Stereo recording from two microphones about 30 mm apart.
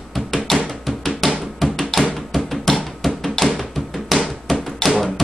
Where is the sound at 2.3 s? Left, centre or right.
Centre.